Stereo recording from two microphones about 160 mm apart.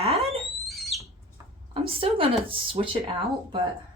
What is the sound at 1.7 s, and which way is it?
Speech, 35° right (ahead or behind).